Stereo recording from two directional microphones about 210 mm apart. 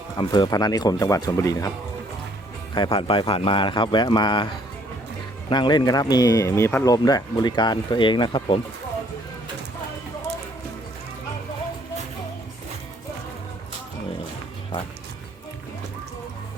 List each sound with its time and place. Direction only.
0.2 s speech: 20° left (ahead or behind)
2.7 s speech: 25° left (ahead or behind)